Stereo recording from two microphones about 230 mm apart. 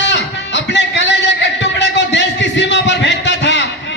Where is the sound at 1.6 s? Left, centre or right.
Left.